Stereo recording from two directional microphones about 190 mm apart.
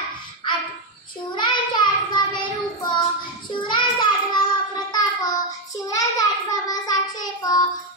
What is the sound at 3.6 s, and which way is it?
Child singing, 25° left (ahead or behind).